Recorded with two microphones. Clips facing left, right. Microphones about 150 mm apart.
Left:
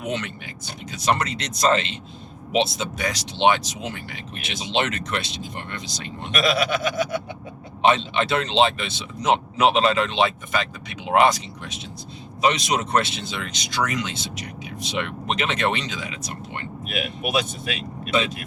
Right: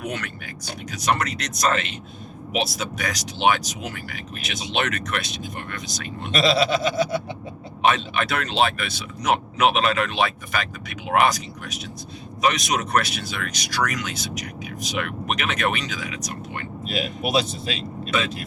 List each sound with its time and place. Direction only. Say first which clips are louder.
0.0 s speech: left 2 dB; 25° left (ahead or behind)
6.3 s bleat: right 2 dB; 30° right (ahead or behind)
7.9 s speech: left 2 dB; 25° left (ahead or behind)
16.8 s speech: right 2 dB; 30° right (ahead or behind)